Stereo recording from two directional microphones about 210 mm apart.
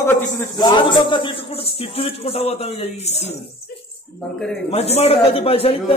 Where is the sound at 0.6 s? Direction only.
20° left (ahead or behind).